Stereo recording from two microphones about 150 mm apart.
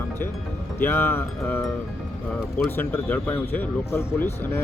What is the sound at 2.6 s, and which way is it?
Speech, 15° left (ahead or behind).